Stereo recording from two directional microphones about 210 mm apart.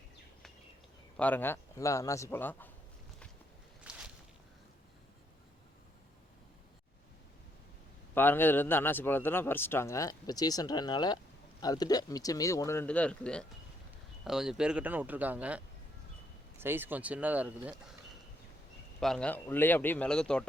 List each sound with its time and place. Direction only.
1.1 s speech: 5° left (ahead or behind)
3.9 s walk: 5° right (ahead or behind)
8.1 s a man's voice: 10° left (ahead or behind); by 17.7 s 5° right (ahead or behind)
18.9 s a man's voice: centre (ahead or behind)